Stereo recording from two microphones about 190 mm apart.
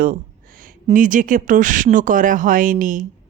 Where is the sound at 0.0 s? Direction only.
45° right (ahead or behind).